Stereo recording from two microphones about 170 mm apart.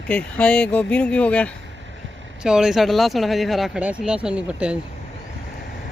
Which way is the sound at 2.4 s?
5° right (ahead or behind).